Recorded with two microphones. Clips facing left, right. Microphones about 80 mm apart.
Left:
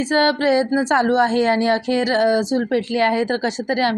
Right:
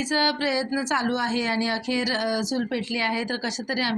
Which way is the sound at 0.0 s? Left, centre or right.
Left.